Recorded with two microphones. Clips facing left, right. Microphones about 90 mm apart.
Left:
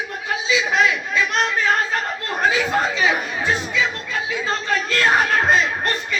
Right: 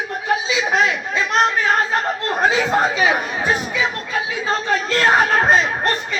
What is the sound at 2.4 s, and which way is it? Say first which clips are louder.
Speech: right 2 dB; 25° right (ahead or behind).